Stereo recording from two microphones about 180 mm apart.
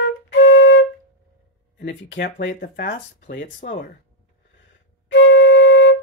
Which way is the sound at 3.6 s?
45° left (ahead or behind).